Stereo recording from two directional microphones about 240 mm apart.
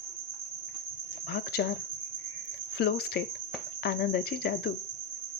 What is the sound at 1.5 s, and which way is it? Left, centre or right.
Cricket, left.